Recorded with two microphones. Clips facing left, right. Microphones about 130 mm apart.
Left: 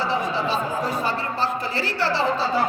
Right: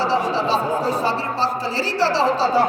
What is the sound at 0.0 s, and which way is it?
A man's voice, 35° right (ahead or behind).